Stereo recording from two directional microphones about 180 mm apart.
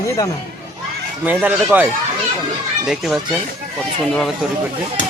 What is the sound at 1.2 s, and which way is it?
Speech, 10° right (ahead or behind).